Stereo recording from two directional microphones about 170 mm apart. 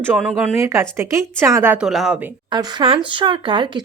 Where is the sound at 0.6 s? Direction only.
15° right (ahead or behind).